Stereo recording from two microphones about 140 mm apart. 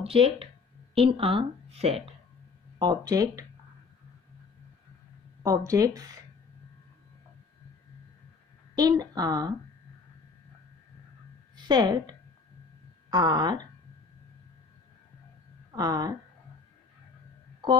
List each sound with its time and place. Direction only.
0.0 s a woman's voice: 40° right (ahead or behind)
2.8 s a woman's voice: 30° right (ahead or behind)
5.4 s a woman's voice: 25° right (ahead or behind)
8.7 s a woman's voice: 25° right (ahead or behind)
11.5 s a woman's voice: 30° right (ahead or behind)
15.7 s a woman's voice: 30° right (ahead or behind)